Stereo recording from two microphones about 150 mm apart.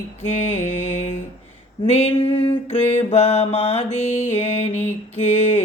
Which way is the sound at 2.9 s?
45° left (ahead or behind).